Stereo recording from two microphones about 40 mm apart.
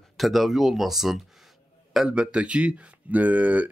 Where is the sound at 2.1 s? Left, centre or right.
Right.